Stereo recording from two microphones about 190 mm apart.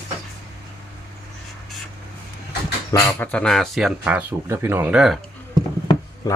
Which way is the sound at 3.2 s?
5° left (ahead or behind).